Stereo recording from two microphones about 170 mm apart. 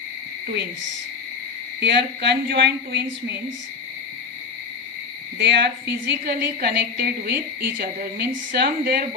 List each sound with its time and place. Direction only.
1.8 s a woman's voice: 85° right
5.4 s a woman's voice: 85° right; by 9.0 s 65° right (ahead or behind)